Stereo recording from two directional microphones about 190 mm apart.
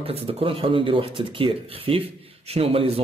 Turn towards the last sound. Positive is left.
turn(degrees=-30)  # may be behind; listen again after turning